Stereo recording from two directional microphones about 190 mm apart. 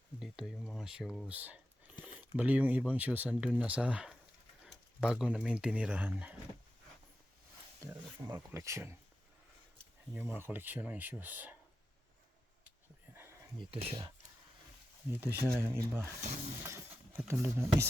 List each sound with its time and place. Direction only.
0.2 s speech: 5° right (ahead or behind)
1.3 s a sound: 10° right (ahead or behind)
2.3 s speech: 10° right (ahead or behind)
7.8 s speech: 15° right (ahead or behind)
10.2 s speech: 10° right (ahead or behind)
13.1 s a sound: 10° right (ahead or behind)
15.1 s speech: 10° right (ahead or behind)